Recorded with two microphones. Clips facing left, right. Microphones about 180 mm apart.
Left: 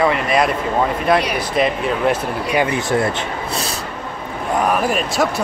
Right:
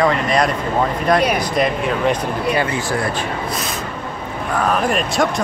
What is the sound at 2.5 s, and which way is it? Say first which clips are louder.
Speech: left 2 dB; 20° left (ahead or behind).